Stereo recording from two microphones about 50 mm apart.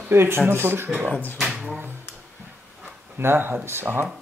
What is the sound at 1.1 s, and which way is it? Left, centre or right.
Speech, left.